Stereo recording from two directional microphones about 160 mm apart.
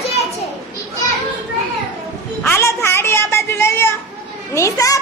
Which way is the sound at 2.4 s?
15° left (ahead or behind).